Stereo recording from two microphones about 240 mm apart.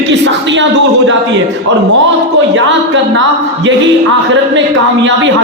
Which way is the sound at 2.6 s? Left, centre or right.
Right.